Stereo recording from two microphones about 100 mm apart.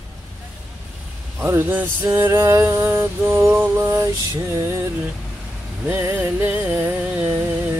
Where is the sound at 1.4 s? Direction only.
25° right (ahead or behind).